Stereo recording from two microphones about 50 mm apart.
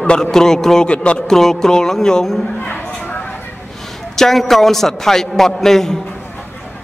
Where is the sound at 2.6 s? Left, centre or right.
Left.